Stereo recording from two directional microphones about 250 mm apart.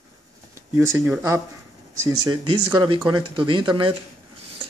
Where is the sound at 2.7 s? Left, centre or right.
Centre.